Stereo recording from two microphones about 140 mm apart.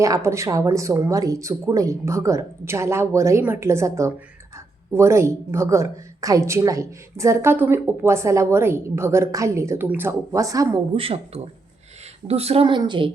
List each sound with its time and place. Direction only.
0.0 s speech: 20° right (ahead or behind)
10.9 s speech: 40° right (ahead or behind)
12.3 s a woman's voice: 45° right (ahead or behind)
12.6 s speech: 35° right (ahead or behind)